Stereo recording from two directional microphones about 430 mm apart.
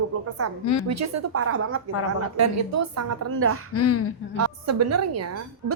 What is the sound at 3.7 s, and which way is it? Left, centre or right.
Speech, left.